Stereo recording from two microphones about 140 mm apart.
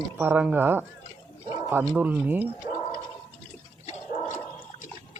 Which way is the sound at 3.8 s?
60° left (ahead or behind).